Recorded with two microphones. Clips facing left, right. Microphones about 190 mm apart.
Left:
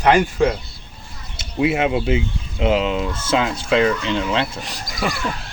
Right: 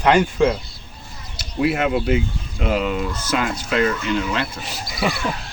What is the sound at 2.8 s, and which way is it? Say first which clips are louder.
Speech: left 1 dB; 25° left (ahead or behind).